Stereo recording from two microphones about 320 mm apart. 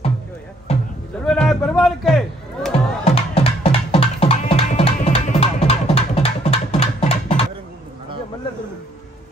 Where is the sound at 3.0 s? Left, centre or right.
Centre.